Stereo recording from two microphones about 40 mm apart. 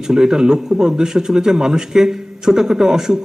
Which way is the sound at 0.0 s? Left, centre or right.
Centre.